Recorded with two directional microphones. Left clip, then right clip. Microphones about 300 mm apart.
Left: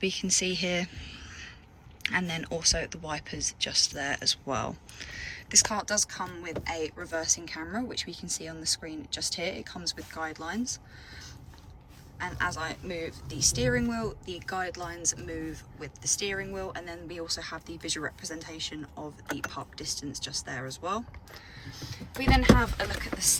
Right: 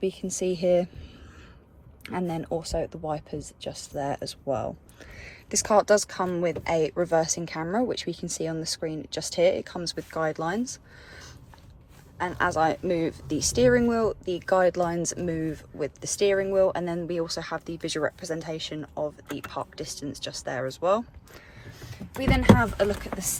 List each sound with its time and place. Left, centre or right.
0.0 s speech: centre
2.0 s speech: centre
21.8 s speech: centre